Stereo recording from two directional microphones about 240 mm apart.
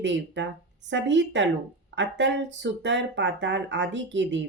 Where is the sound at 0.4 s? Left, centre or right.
Right.